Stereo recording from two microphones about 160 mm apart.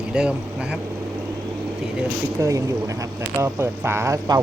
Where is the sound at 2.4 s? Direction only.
20° right (ahead or behind).